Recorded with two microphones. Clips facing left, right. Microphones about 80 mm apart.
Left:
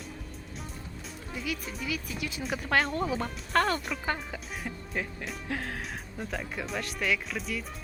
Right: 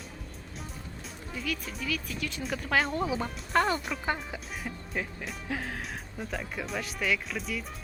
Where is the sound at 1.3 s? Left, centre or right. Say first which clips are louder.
Even; centre.